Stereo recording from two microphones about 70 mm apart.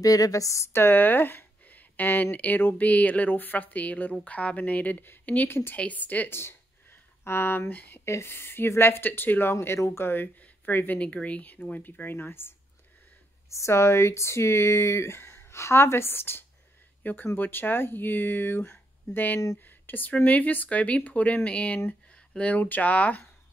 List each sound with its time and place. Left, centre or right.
0.0 s speech: left
0.7 s speech: left
5.5 s speech: left
5.8 s speech: left
8.0 s speech: left
13.5 s speech: left